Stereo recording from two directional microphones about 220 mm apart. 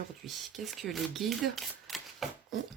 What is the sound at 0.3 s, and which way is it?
Speech, centre (ahead or behind).